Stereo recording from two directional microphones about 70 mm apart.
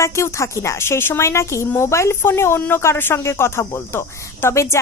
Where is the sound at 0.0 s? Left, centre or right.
Left.